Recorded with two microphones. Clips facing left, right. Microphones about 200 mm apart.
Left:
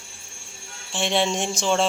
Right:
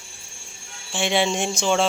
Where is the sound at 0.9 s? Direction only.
Centre (ahead or behind).